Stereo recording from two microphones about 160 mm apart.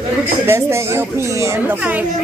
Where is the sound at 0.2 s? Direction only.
15° right (ahead or behind).